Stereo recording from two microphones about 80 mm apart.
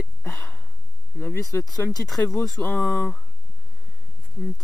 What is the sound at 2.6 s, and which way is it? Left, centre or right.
Speech, centre.